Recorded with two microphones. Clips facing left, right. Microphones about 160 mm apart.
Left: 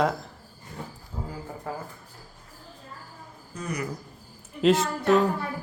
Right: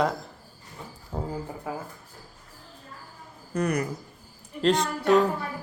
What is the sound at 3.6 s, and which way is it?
Speech, 65° right (ahead or behind).